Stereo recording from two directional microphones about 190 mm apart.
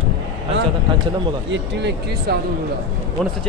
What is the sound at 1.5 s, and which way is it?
Speech, 65° right (ahead or behind).